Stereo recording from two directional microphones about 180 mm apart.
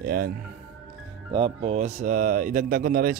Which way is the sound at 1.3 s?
35° right (ahead or behind).